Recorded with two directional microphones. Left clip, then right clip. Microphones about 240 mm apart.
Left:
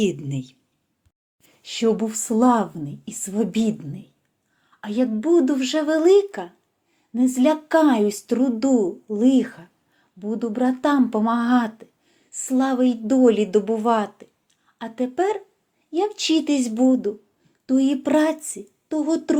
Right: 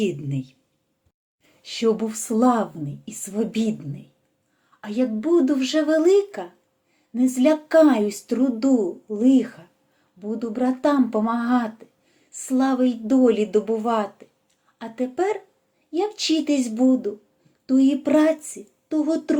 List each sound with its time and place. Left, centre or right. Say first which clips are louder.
0.0 s speech: left 2 dB; left
1.6 s speech: even; left